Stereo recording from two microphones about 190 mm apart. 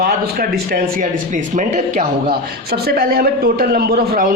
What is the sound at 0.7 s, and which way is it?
A man's voice, 40° right (ahead or behind).